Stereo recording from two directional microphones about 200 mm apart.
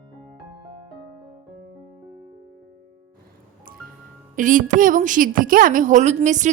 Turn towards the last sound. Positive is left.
turn(degrees=-35)  # may be behind; listen again after turning